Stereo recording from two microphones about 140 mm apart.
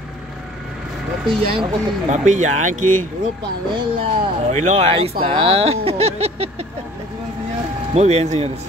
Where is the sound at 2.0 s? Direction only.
60° right (ahead or behind).